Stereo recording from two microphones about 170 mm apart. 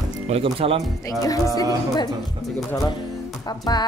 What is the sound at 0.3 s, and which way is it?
Speech, 35° right (ahead or behind).